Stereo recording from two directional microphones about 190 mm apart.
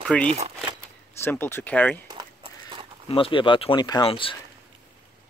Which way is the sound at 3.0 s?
30° left (ahead or behind).